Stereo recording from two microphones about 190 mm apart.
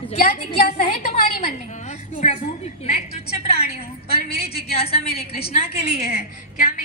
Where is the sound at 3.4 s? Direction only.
35° left (ahead or behind).